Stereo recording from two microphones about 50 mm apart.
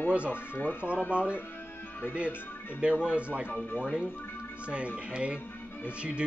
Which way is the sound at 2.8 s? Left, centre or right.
Right.